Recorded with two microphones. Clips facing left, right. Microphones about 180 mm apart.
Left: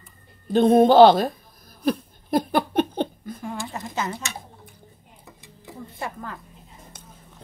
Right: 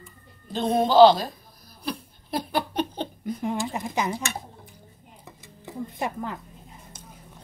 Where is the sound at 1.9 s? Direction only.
50° left (ahead or behind).